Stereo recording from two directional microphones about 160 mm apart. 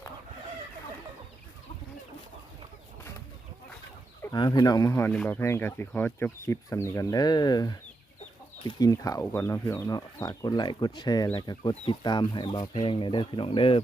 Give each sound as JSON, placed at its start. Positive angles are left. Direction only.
{"t": 4.4, "sound": "speech", "side_deg": 25}